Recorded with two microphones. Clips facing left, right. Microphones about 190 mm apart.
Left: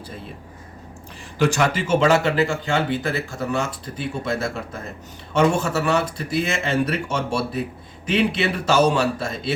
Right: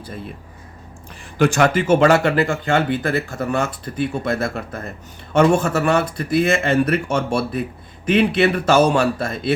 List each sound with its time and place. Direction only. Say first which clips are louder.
1.4 s speech: right 4 dB; 55° right (ahead or behind)